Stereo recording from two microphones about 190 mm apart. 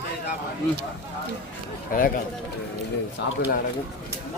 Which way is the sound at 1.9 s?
45° left (ahead or behind).